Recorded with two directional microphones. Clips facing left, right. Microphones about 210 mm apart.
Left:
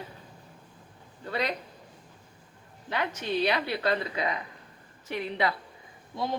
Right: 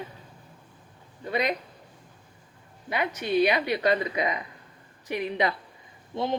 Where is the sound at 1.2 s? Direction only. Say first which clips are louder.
Right 4 dB; 15° right (ahead or behind).